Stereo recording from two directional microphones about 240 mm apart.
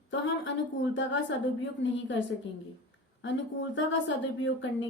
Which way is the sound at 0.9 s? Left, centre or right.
Left.